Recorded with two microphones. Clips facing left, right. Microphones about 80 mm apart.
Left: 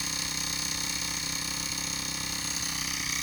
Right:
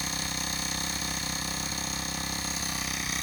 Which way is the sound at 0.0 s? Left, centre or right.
Right.